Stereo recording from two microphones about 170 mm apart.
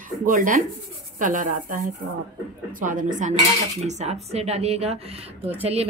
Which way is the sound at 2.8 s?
50° right (ahead or behind).